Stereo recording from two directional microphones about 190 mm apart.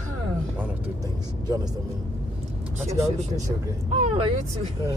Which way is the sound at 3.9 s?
35° right (ahead or behind).